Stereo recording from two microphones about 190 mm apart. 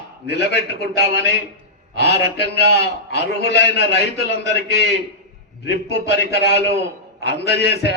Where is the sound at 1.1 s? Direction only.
65° left (ahead or behind).